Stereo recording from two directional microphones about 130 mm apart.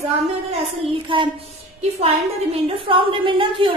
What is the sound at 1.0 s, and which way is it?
Speech, 40° right (ahead or behind).